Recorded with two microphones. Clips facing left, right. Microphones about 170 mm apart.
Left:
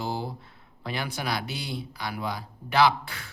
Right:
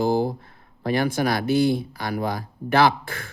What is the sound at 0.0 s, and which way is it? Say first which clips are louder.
Speech: right 11 dB; 50° right (ahead or behind).